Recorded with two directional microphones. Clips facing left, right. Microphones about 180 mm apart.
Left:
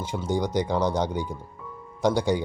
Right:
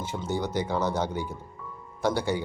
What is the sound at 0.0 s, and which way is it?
Speech, 15° left (ahead or behind).